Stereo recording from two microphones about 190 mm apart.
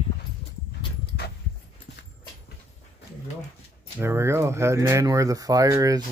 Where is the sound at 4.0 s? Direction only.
15° right (ahead or behind).